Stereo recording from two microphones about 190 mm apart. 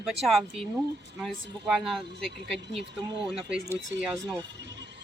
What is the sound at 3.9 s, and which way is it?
Speech, 15° right (ahead or behind).